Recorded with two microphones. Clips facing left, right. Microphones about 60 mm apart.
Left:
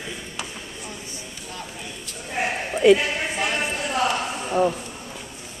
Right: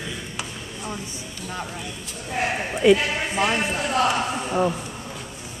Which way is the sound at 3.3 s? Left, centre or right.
Centre.